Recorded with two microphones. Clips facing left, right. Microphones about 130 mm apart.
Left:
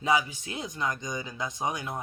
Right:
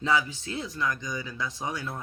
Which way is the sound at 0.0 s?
15° left (ahead or behind).